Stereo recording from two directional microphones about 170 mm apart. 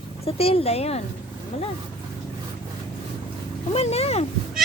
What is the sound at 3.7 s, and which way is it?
Speech, 35° left (ahead or behind).